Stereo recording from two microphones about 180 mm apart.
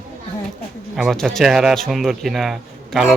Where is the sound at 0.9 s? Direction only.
Centre (ahead or behind).